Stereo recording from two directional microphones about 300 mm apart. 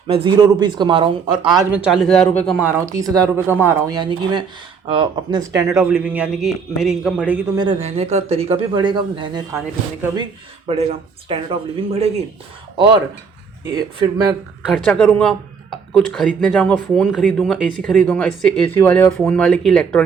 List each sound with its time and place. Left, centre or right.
0.1 s speech: centre
14.7 s speech: centre